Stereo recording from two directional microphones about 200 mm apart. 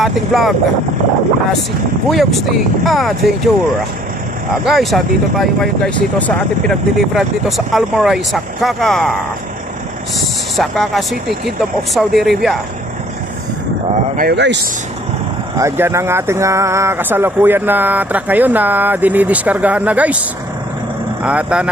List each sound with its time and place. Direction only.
0.0 s speech: centre (ahead or behind)
2.0 s speech: centre (ahead or behind)
4.6 s speech: centre (ahead or behind)
10.6 s speech: centre (ahead or behind)
14.2 s speech: 55° right (ahead or behind)
15.5 s speech: 15° right (ahead or behind)
21.2 s speech: 5° right (ahead or behind)